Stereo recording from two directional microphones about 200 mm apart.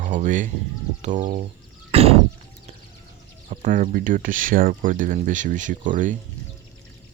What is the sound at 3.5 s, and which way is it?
Speech, 40° right (ahead or behind).